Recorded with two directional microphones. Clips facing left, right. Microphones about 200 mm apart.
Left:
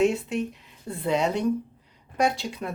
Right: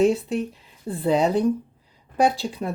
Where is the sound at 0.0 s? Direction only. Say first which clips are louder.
Right 3 dB; 35° right (ahead or behind).